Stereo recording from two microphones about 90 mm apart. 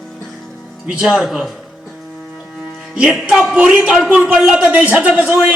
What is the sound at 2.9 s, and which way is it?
A man's voice, 5° right (ahead or behind).